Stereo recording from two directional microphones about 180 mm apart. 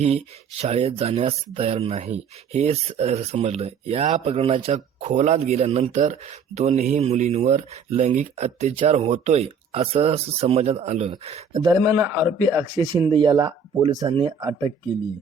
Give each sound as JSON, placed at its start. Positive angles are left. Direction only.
{"t": 0.0, "sound": "speech", "side_deg": -35}
{"t": 11.5, "sound": "speech", "side_deg": -20}
{"t": 12.4, "sound": "speech", "side_deg": -25}